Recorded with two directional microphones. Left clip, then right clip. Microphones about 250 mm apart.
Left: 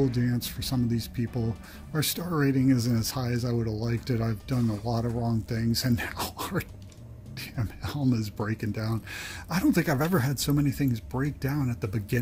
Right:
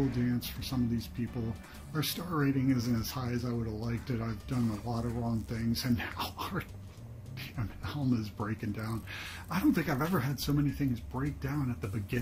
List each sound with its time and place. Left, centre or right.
0.1 s speech: left